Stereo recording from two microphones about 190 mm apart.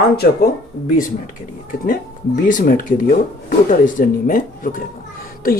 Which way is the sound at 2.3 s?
45° left (ahead or behind).